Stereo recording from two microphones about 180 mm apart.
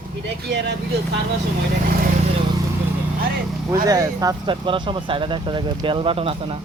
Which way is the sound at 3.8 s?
20° right (ahead or behind).